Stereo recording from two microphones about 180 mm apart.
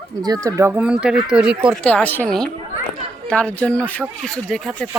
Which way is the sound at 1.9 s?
10° left (ahead or behind).